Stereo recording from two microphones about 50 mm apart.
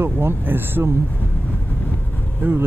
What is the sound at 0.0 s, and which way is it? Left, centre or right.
Speech, right.